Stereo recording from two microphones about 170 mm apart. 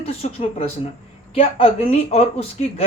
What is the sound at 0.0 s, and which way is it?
Speech, 35° left (ahead or behind).